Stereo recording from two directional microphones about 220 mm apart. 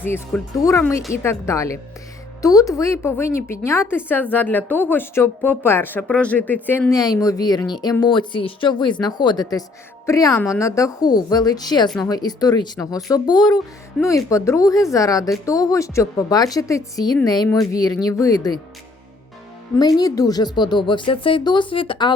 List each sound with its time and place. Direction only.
0.0 s a woman's voice: 10° left (ahead or behind)
20.0 s speech: 15° left (ahead or behind)